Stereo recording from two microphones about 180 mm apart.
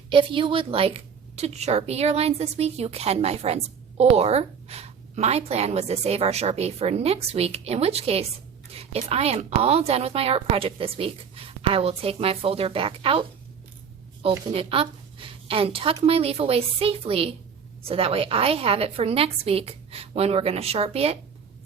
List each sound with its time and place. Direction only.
0.1 s a woman's voice: 30° right (ahead or behind)
14.3 s a woman's voice: 30° right (ahead or behind)